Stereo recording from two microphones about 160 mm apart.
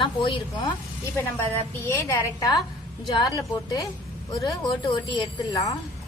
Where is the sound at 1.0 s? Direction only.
15° left (ahead or behind).